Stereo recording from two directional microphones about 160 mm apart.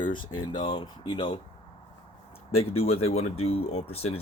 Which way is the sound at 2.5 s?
40° left (ahead or behind).